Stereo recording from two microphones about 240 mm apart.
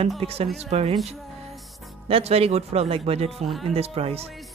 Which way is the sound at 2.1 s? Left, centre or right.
Right.